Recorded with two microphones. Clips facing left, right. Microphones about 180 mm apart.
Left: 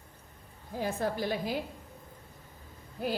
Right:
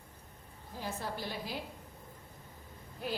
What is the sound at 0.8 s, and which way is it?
Speech, 55° left (ahead or behind).